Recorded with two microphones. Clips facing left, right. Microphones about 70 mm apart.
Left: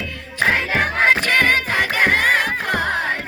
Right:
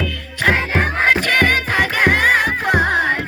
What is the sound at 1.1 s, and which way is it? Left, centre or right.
Music, right.